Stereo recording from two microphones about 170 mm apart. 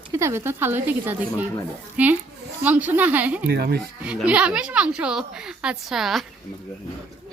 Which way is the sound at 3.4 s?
70° right (ahead or behind).